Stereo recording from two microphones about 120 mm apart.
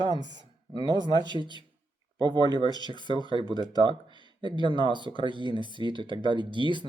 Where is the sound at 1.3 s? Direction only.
40° right (ahead or behind).